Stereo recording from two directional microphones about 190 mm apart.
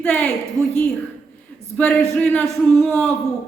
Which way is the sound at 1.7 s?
5° left (ahead or behind).